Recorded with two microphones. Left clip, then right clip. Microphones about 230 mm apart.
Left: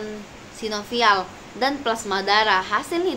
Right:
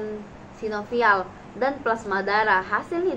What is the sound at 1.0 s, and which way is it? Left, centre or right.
A woman's voice, centre.